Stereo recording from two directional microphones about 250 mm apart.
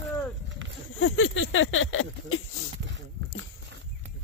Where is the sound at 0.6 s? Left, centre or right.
Right.